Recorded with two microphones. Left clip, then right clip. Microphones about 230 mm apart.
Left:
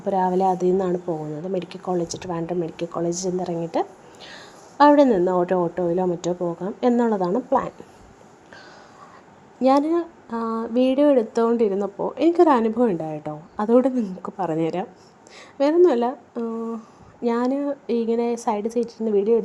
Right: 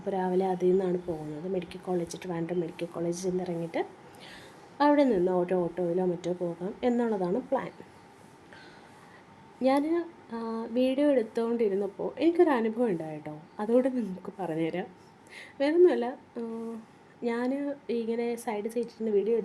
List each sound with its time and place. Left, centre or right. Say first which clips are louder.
0.0 s speech: left 9 dB; centre
9.6 s a woman's voice: left 8 dB; centre